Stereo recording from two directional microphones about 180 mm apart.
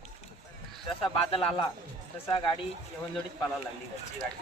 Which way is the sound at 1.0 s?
30° left (ahead or behind).